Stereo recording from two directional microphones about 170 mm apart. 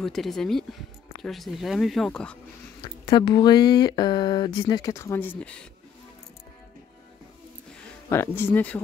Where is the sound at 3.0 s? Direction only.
25° left (ahead or behind).